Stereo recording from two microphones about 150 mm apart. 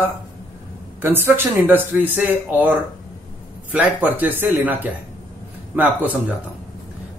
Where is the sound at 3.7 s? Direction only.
10° right (ahead or behind).